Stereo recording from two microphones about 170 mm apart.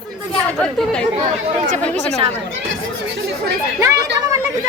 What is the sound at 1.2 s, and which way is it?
Speech, 45° right (ahead or behind).